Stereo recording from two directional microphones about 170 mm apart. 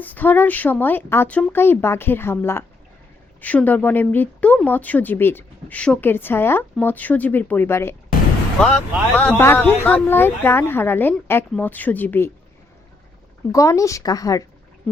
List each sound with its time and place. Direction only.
0.0 s speech: 10° left (ahead or behind)
8.6 s speech: 5° left (ahead or behind)
13.5 s speech: 20° left (ahead or behind)